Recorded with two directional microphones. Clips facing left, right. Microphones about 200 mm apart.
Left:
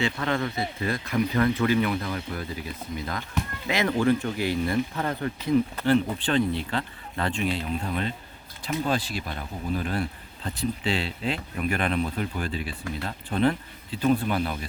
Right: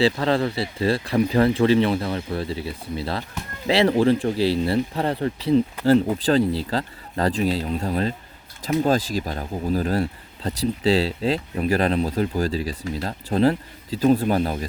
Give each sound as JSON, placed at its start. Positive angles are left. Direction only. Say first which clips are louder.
{"t": 0.0, "sound": "speech", "louder": "right 7 dB", "side_deg": -30}